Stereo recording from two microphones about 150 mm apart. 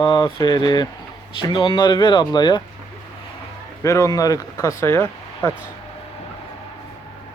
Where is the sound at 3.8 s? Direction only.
20° left (ahead or behind).